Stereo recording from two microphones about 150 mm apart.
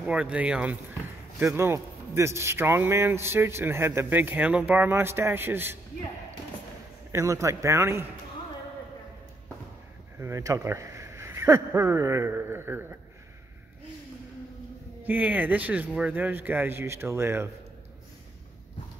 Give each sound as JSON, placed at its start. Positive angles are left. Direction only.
{"t": 0.0, "sound": "a man's voice", "side_deg": -10}
{"t": 7.1, "sound": "a man's voice", "side_deg": -20}
{"t": 10.1, "sound": "speech", "side_deg": -20}
{"t": 15.0, "sound": "a man's voice", "side_deg": -10}